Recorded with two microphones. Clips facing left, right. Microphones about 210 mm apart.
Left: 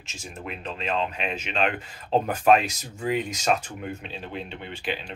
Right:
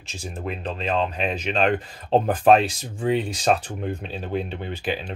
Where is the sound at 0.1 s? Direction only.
35° right (ahead or behind).